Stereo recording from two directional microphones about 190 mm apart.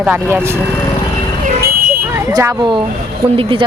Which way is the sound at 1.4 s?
50° right (ahead or behind).